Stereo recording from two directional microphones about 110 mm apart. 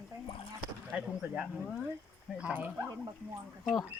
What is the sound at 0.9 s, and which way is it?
Speech, 10° right (ahead or behind).